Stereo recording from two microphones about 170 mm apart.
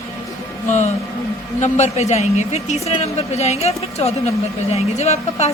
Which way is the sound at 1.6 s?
40° left (ahead or behind).